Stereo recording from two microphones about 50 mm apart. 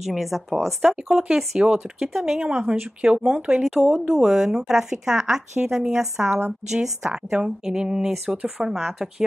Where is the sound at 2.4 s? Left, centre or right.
Centre.